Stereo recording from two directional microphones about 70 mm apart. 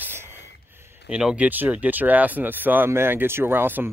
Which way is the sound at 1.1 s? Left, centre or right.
Centre.